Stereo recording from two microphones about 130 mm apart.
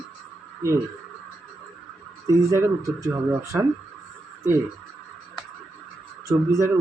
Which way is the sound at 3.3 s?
20° right (ahead or behind).